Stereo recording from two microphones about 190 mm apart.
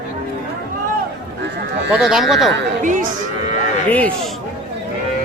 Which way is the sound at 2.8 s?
40° right (ahead or behind).